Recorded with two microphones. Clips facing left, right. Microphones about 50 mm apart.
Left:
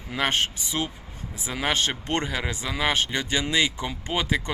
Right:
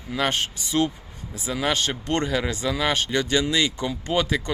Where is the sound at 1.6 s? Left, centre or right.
Left.